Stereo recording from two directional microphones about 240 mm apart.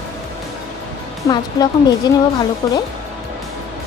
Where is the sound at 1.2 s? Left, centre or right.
Centre.